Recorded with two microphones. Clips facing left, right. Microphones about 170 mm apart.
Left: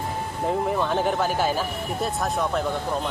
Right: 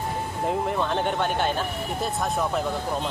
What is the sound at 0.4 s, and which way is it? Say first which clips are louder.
Speech: left 2 dB; centre (ahead or behind).